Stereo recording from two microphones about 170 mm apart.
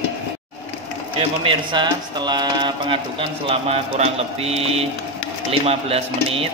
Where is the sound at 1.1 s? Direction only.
30° right (ahead or behind).